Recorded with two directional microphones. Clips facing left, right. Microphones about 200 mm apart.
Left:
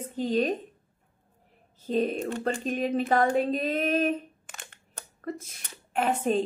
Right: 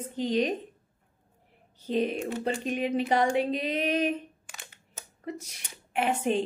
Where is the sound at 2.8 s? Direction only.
40° left (ahead or behind).